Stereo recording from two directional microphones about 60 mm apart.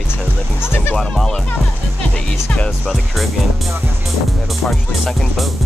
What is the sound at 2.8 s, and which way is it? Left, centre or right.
Speech, centre.